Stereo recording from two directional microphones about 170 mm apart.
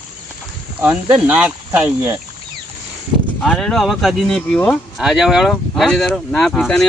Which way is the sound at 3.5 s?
Centre (ahead or behind).